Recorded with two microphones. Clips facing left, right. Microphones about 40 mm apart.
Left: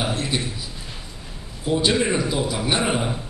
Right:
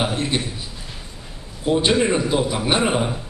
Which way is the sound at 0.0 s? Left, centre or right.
Right.